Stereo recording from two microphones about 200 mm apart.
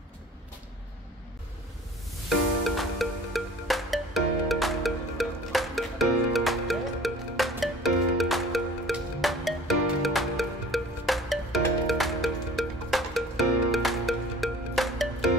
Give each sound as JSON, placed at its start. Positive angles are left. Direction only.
{"t": 2.2, "sound": "music", "side_deg": 0}